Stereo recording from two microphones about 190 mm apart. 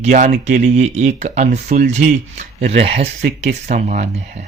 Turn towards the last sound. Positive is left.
turn(degrees=-40)  # may be behind; listen again after turning